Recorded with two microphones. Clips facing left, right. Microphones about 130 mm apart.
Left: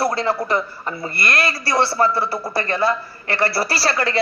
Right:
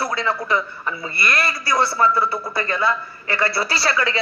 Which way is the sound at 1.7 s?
30° left (ahead or behind).